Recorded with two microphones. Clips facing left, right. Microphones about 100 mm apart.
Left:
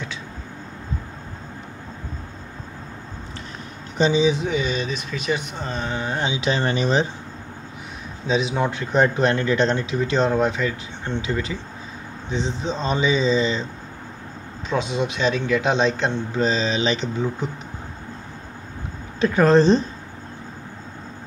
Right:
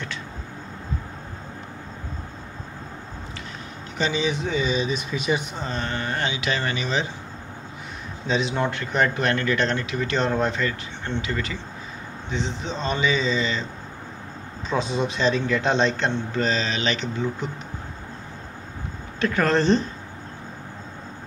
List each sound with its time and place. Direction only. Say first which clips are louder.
4.0 s a man's voice: left 6 dB; 20° left (ahead or behind)
4.6 s speech: right 1 dB; 5° right (ahead or behind)
5.6 s speech: left 1 dB; 5° left (ahead or behind)
6.4 s speech: left 5 dB; 30° left (ahead or behind)
8.3 s a man's voice: left 2 dB; 10° left (ahead or behind)
15.0 s speech: right 1 dB; 5° left (ahead or behind)
16.3 s a man's voice: left 5 dB; 20° left (ahead or behind)
19.1 s speech: left 6 dB; 15° left (ahead or behind)